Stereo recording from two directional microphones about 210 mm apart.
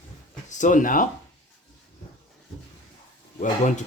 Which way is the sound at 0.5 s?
35° left (ahead or behind).